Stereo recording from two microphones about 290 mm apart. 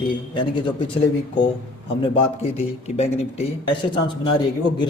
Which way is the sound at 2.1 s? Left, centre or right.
Left.